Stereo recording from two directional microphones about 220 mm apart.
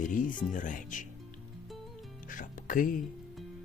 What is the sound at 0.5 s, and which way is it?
Speech, 35° left (ahead or behind).